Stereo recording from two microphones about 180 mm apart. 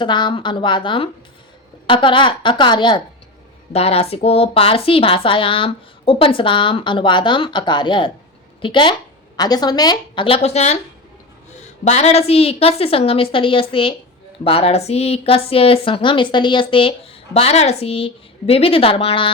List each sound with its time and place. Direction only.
0.0 s a woman's voice: 25° left (ahead or behind)